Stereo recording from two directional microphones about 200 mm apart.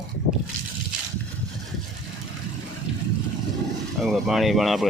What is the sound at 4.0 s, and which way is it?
Speech, centre (ahead or behind).